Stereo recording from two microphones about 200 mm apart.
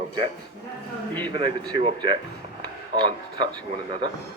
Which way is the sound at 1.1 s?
10° left (ahead or behind).